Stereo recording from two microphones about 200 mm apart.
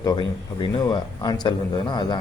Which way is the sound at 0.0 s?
20° left (ahead or behind).